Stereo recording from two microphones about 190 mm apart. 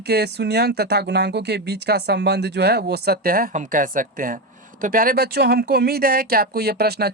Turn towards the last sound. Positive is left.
turn(degrees=-55)  # may be behind; listen again after turning